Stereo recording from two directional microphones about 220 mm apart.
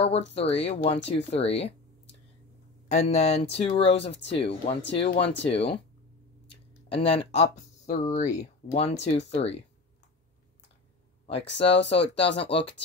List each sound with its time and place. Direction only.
0.3 s speech: 25° left (ahead or behind)
2.9 s speech: 30° left (ahead or behind)
4.1 s speech: 55° left (ahead or behind)
4.4 s speech: 25° left (ahead or behind)
5.2 s speech: 50° left (ahead or behind)
5.5 s speech: 25° left (ahead or behind)
11.2 s speech: 25° left (ahead or behind)